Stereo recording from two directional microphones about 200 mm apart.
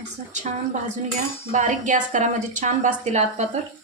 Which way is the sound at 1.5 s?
40° right (ahead or behind).